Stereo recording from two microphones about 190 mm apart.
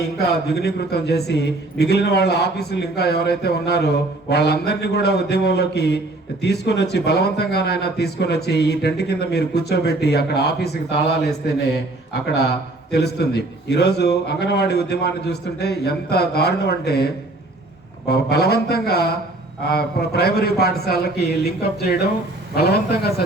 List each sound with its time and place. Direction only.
0.5 s speech: 60° left (ahead or behind)
12.9 s speech: 60° left (ahead or behind)
18.1 s speech: 55° left (ahead or behind)